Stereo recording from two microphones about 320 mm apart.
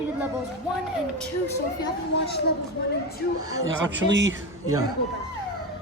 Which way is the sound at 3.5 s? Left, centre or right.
Right.